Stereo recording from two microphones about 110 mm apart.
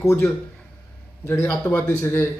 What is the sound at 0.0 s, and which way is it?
Speech, 25° left (ahead or behind).